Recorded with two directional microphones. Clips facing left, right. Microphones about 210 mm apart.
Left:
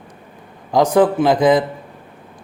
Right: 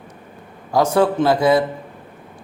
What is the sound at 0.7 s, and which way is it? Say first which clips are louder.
Speech: left 2 dB; 15° left (ahead or behind).